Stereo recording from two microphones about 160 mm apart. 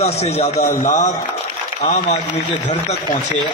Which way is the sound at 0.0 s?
40° left (ahead or behind).